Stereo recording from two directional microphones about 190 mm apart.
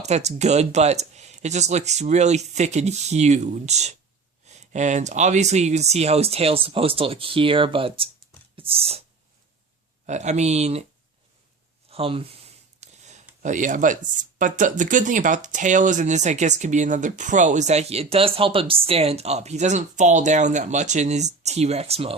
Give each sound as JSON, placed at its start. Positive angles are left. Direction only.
{"t": 0.0, "sound": "speech", "side_deg": -35}
{"t": 8.5, "sound": "a sound", "side_deg": -30}
{"t": 10.1, "sound": "speech", "side_deg": -40}
{"t": 11.9, "sound": "speech", "side_deg": -30}
{"t": 12.8, "sound": "a sound", "side_deg": -35}
{"t": 13.4, "sound": "speech", "side_deg": -40}